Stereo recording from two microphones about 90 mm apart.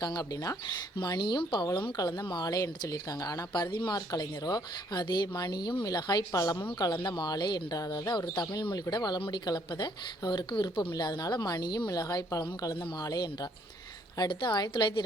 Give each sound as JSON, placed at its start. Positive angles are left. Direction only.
{"t": 0.0, "sound": "a woman's voice", "side_deg": 45}
{"t": 2.5, "sound": "a woman's voice", "side_deg": 40}
{"t": 4.1, "sound": "a woman's voice", "side_deg": 50}
{"t": 14.2, "sound": "speech", "side_deg": 55}